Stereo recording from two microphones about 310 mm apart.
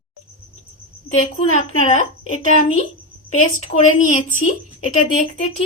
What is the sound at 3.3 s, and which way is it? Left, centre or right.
Speech, left.